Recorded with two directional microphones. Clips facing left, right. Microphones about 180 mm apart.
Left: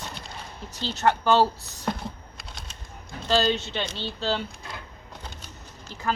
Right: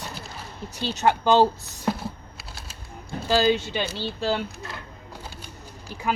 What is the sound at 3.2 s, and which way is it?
Speech, 10° right (ahead or behind).